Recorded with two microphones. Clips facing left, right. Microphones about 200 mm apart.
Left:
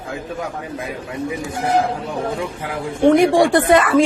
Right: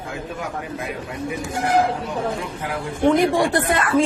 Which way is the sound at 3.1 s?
80° left.